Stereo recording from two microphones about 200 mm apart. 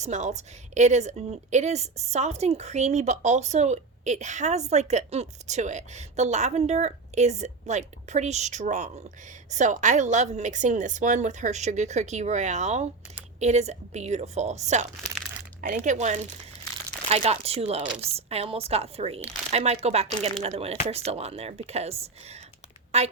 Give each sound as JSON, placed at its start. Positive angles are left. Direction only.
{"t": 0.0, "sound": "a woman's voice", "side_deg": -35}
{"t": 17.8, "sound": "a woman's voice", "side_deg": -5}
{"t": 18.3, "sound": "a woman's voice", "side_deg": -30}